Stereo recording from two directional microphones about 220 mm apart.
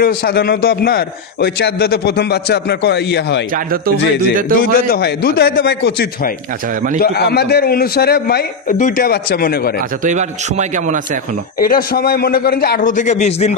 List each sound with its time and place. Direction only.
0.0 s a man's voice: 45° left (ahead or behind)
3.5 s speech: 40° right (ahead or behind)
4.6 s a man's voice: 40° left (ahead or behind)
10.0 s speech: 30° right (ahead or behind)
11.6 s a man's voice: 40° left (ahead or behind)